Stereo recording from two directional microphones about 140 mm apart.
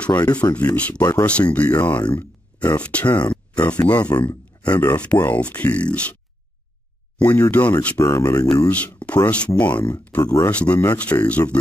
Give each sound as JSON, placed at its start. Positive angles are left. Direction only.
{"t": 0.1, "sound": "speech", "side_deg": 30}
{"t": 0.7, "sound": "speech", "side_deg": 10}
{"t": 7.2, "sound": "speech", "side_deg": 15}
{"t": 8.6, "sound": "speech", "side_deg": 10}
{"t": 10.2, "sound": "speech", "side_deg": 20}
{"t": 10.5, "sound": "speech", "side_deg": 10}